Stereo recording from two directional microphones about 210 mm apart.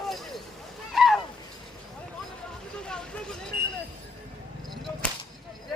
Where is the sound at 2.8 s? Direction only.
5° left (ahead or behind).